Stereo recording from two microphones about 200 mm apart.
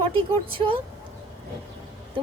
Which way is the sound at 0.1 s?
25° right (ahead or behind).